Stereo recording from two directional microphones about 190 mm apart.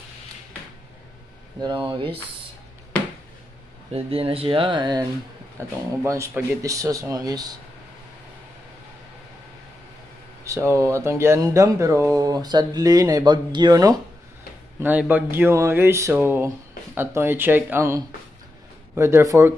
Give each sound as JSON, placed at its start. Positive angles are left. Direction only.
{"t": 1.6, "sound": "speech", "side_deg": -25}
{"t": 3.9, "sound": "speech", "side_deg": -30}
{"t": 10.4, "sound": "speech", "side_deg": -15}
{"t": 14.8, "sound": "speech", "side_deg": -10}